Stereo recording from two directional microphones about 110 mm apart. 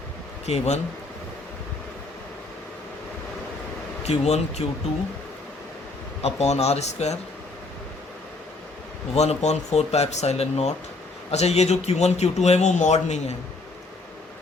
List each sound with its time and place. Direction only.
0.4 s a man's voice: 75° left (ahead or behind)
4.0 s speech: 80° left
6.2 s speech: 75° left (ahead or behind)
9.1 s speech: 80° left